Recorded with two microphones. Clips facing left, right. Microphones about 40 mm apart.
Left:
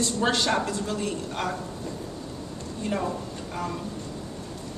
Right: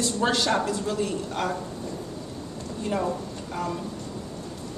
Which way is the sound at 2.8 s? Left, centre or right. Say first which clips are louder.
Right 1 dB; centre.